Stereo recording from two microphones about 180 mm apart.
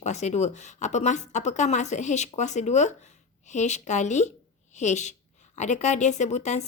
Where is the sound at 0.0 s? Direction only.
40° left (ahead or behind).